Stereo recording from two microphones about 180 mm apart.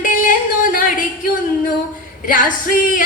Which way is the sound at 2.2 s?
50° left (ahead or behind).